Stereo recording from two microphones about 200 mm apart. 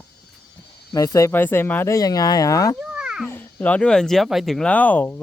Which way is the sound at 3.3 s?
10° left (ahead or behind).